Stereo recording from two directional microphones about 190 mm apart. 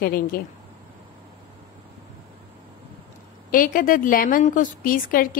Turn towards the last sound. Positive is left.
turn(degrees=50)  # may be behind; listen again after turning